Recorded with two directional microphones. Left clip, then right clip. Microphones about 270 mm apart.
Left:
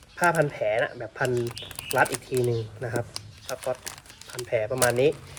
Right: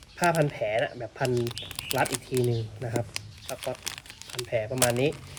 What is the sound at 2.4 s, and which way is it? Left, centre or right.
Speech, left.